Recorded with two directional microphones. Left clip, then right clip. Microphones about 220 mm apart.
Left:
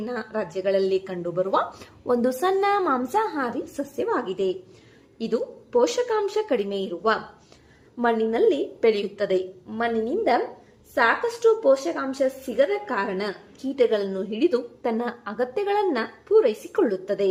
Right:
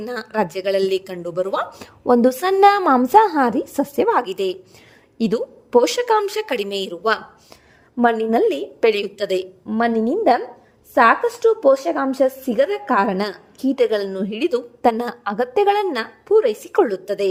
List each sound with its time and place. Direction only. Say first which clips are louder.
0.0 s a woman's voice: right 6 dB; 50° right (ahead or behind)